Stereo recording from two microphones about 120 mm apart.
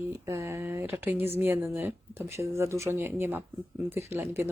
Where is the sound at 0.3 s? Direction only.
25° right (ahead or behind).